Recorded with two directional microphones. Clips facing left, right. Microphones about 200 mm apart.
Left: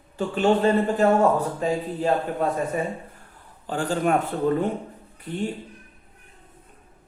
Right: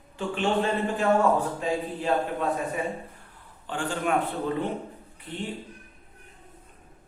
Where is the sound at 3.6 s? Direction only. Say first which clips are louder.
Left 5 dB; 40° left (ahead or behind).